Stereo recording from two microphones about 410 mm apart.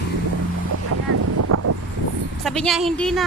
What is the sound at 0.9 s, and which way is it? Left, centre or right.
Boat, right.